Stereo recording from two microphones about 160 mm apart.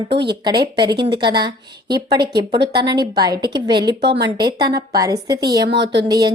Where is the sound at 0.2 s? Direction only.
25° right (ahead or behind).